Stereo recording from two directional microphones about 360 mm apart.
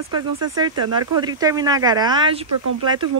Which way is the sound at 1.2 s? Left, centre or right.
Centre.